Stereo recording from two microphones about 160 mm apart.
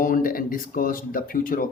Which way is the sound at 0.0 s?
60° left (ahead or behind).